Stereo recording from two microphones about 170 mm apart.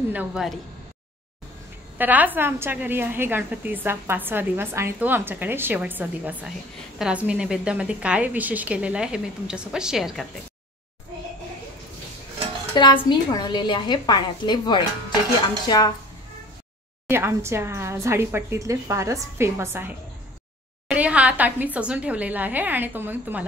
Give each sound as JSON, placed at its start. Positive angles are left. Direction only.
{"t": 0.1, "sound": "a woman's voice", "side_deg": -5}
{"t": 2.0, "sound": "a woman's voice", "side_deg": -10}
{"t": 12.7, "sound": "a woman's voice", "side_deg": 30}
{"t": 17.1, "sound": "a woman's voice", "side_deg": -15}
{"t": 20.9, "sound": "a woman's voice", "side_deg": -10}